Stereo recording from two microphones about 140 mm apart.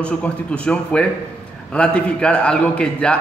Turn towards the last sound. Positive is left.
turn(degrees=5)  # may be behind; listen again after turning